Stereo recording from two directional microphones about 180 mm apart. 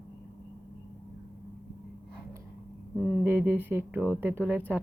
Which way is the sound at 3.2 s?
10° right (ahead or behind).